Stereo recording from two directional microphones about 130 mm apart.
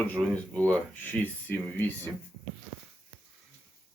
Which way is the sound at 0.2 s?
10° left (ahead or behind).